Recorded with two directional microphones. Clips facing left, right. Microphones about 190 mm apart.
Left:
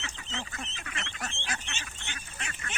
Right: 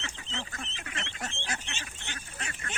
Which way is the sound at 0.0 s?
35° right (ahead or behind).